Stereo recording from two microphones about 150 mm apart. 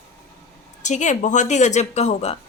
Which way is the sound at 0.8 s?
50° left (ahead or behind).